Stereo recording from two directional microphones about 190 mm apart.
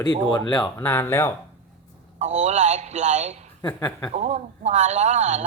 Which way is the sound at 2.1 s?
35° right (ahead or behind).